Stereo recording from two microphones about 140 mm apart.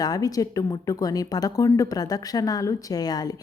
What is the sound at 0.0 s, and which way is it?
Speech, 25° left (ahead or behind).